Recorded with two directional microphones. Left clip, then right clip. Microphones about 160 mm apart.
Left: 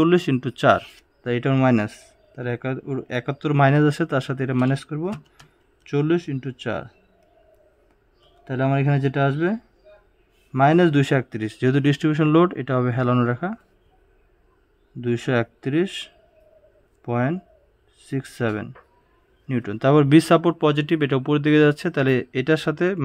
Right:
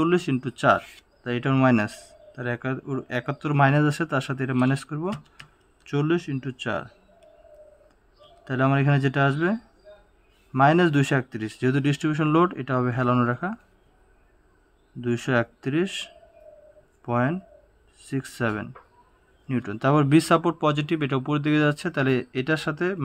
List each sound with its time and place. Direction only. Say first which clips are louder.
0.0 s speech: left 4 dB; 30° left (ahead or behind)
8.5 s speech: even; 15° left (ahead or behind)
15.0 s speech: left 2 dB; 25° left (ahead or behind)